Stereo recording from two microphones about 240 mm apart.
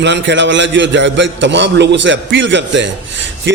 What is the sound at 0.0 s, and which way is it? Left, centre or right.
A man's voice, right.